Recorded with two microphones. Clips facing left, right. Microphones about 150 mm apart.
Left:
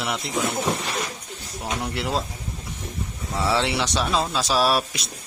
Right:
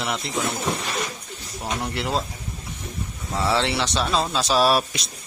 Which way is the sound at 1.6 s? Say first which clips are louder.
Even; centre (ahead or behind).